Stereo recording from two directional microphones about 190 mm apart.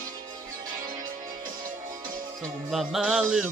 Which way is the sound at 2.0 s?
45° right (ahead or behind).